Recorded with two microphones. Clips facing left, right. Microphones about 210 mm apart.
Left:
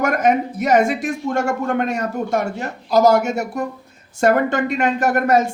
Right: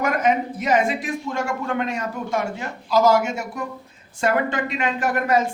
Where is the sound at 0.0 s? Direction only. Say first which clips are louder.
Left 3 dB; 45° left (ahead or behind).